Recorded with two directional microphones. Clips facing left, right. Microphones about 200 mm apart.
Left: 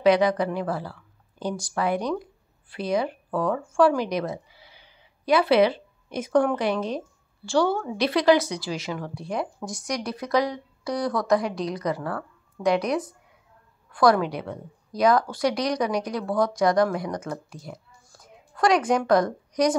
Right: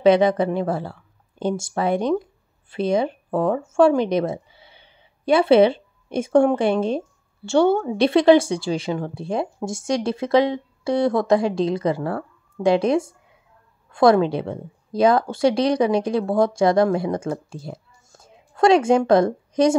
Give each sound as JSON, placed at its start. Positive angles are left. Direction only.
{"t": 0.0, "sound": "a woman's voice", "side_deg": -25}